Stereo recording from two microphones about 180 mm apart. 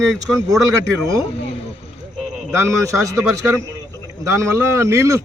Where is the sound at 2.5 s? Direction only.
15° right (ahead or behind).